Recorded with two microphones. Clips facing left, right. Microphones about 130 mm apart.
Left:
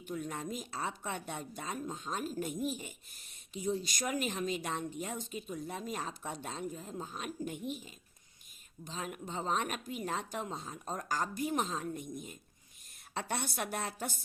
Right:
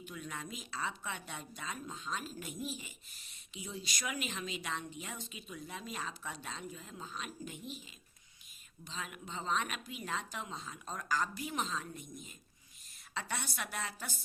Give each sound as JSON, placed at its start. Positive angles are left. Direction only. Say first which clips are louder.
{"t": 0.0, "sound": "speech", "louder": "left 6 dB", "side_deg": 45}